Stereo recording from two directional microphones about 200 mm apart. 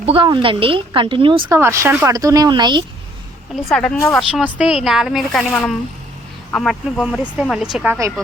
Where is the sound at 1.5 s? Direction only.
15° right (ahead or behind).